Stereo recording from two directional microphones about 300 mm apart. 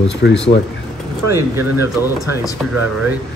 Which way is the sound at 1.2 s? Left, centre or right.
Centre.